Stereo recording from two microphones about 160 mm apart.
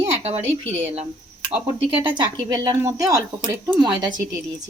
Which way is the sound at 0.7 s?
15° right (ahead or behind).